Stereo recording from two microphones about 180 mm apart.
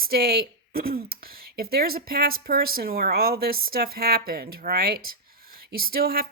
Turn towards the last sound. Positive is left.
turn(degrees=-55)  # may be behind; listen again after turning